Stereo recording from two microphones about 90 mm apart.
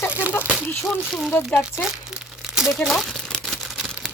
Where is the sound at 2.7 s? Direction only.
Centre (ahead or behind).